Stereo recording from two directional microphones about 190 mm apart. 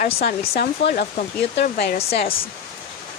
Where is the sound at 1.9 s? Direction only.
30° left (ahead or behind).